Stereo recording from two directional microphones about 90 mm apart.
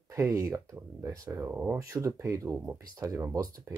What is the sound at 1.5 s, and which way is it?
Speech, 20° right (ahead or behind).